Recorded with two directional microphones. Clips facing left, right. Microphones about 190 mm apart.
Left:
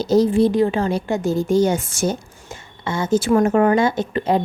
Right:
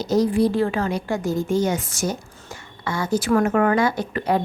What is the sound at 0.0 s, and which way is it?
A woman's voice, 30° left (ahead or behind).